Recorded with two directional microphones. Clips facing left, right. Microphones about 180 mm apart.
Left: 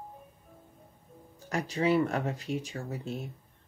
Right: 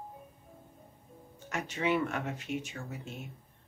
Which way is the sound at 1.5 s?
35° left (ahead or behind).